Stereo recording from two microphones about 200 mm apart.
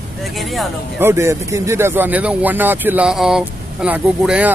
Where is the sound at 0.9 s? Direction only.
10° right (ahead or behind).